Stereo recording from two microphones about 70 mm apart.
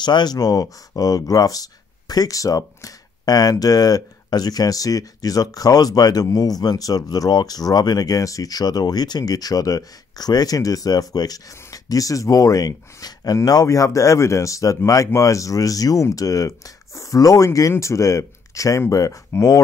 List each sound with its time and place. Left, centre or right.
0.0 s speech: left